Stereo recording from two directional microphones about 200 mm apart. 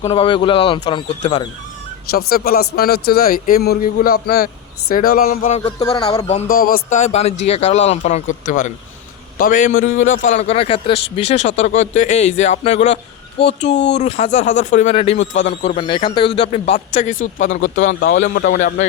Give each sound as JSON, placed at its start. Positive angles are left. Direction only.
{"t": 0.1, "sound": "speech", "side_deg": 25}
{"t": 2.0, "sound": "speech", "side_deg": 50}
{"t": 5.8, "sound": "speech", "side_deg": 20}
{"t": 6.5, "sound": "speech", "side_deg": 45}
{"t": 13.4, "sound": "speech", "side_deg": 60}
{"t": 14.0, "sound": "speech", "side_deg": 30}